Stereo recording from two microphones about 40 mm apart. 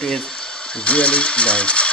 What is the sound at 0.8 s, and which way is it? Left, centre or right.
Speech, left.